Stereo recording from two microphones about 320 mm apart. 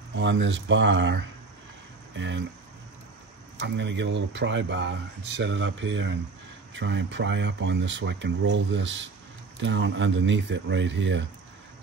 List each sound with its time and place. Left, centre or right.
0.1 s speech: right
3.5 s speech: right